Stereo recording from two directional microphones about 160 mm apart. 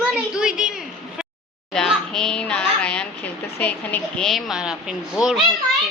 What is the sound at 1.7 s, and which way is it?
A child's voice, 5° left (ahead or behind).